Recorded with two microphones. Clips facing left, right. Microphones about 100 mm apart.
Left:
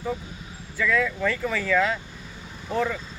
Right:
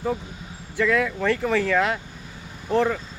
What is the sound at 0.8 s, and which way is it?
Speech, 65° right (ahead or behind).